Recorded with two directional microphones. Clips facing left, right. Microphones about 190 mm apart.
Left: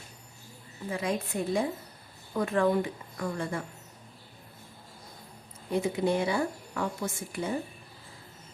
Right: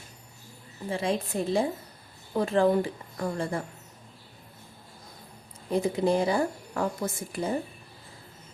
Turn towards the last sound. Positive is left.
turn(degrees=-35)  # may be behind; listen again after turning